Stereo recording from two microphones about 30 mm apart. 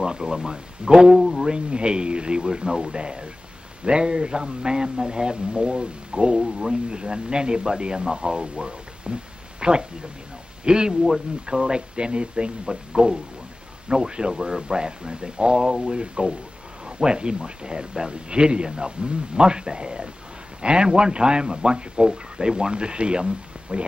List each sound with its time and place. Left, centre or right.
0.0 s a man's voice: right
1.4 s a man's voice: right